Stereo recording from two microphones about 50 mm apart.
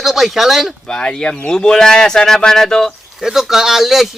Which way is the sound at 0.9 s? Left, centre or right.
Centre.